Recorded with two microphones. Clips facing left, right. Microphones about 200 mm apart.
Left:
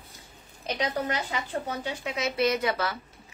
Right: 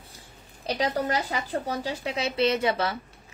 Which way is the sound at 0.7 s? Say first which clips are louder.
Right 3 dB; 40° right (ahead or behind).